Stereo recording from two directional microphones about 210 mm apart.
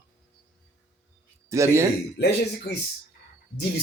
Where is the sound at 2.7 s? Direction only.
50° left (ahead or behind).